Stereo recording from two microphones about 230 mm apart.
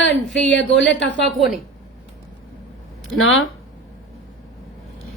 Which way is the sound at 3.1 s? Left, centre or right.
Left.